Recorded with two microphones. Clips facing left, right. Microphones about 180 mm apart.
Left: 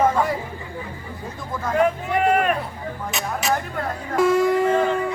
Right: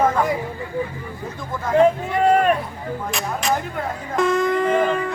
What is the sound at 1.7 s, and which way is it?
Speech, 30° right (ahead or behind).